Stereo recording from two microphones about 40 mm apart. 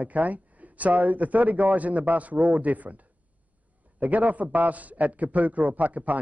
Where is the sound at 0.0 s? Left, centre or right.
Right.